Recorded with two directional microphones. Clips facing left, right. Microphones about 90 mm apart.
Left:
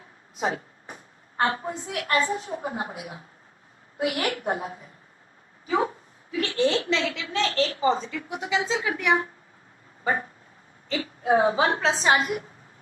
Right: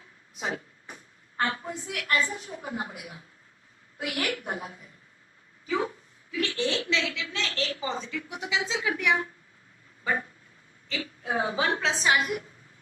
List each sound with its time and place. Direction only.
0.3 s a woman's voice: 40° left (ahead or behind)
10.0 s dog: 35° left (ahead or behind)
10.8 s a woman's voice: 35° left (ahead or behind)